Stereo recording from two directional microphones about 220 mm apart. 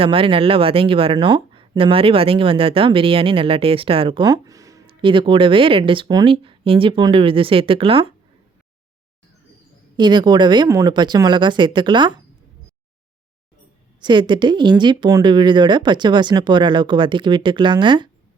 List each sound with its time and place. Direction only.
0.0 s speech: 25° right (ahead or behind)
10.0 s speech: 20° right (ahead or behind)
14.0 s speech: 20° right (ahead or behind)